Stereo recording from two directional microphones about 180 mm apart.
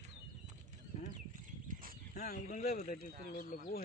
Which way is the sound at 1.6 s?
50° right (ahead or behind).